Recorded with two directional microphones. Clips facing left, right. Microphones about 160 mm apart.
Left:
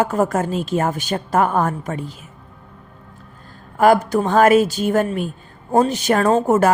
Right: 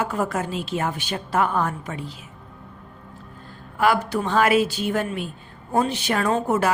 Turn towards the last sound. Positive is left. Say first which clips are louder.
# left 6 dB
turn(degrees=45)  # may be behind; listen again after turning